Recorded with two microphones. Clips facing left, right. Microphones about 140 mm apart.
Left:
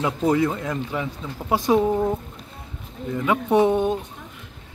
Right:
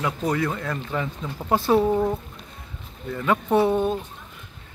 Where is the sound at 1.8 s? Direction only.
Centre (ahead or behind).